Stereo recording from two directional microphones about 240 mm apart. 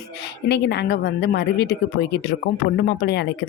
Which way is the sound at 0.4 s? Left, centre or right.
Left.